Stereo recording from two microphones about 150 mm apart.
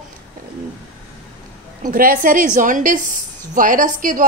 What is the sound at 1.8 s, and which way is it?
A woman's voice, 70° right (ahead or behind).